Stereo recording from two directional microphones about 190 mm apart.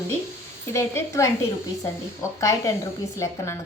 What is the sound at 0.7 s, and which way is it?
Speech, 15° left (ahead or behind).